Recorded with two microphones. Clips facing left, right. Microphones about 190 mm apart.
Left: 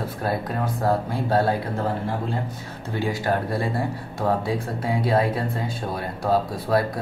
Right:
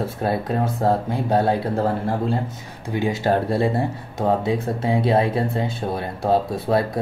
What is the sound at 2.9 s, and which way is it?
Speech, 20° right (ahead or behind).